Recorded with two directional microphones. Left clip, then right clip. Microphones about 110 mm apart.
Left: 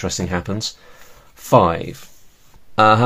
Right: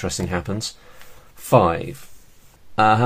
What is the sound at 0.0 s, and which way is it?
Speech, 20° left (ahead or behind).